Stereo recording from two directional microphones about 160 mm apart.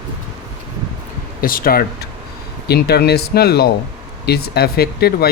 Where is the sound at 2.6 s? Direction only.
85° left.